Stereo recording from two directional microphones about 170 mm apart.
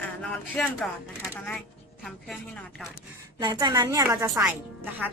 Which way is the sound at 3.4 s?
25° right (ahead or behind).